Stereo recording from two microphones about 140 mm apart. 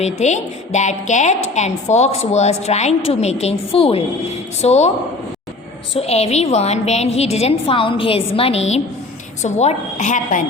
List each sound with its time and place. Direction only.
0.0 s a woman's voice: 55° left (ahead or behind)
5.9 s a woman's voice: 45° left (ahead or behind)